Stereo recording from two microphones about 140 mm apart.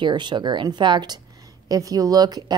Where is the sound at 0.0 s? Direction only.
35° right (ahead or behind).